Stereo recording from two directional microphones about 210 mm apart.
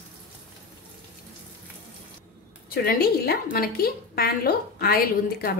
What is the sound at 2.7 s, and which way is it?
A woman's voice, 45° left (ahead or behind).